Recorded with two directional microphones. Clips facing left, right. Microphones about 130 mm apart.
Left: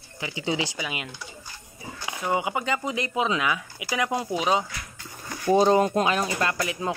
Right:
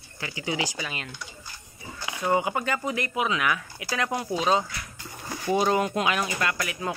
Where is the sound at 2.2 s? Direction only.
10° left (ahead or behind).